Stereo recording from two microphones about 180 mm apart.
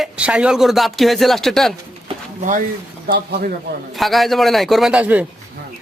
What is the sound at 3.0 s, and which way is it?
Speech, 55° right (ahead or behind).